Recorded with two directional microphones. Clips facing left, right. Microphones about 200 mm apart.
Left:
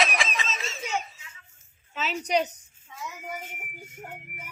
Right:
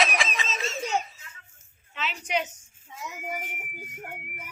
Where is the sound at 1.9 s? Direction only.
40° left (ahead or behind).